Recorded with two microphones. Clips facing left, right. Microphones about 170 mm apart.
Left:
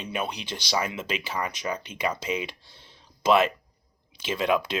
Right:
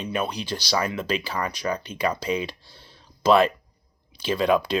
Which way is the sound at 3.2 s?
35° right (ahead or behind).